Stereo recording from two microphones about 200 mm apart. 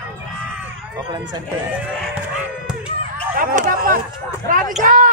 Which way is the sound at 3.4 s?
45° right (ahead or behind).